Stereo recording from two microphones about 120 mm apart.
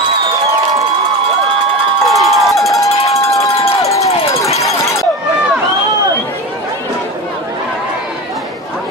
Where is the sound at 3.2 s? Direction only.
25° left (ahead or behind).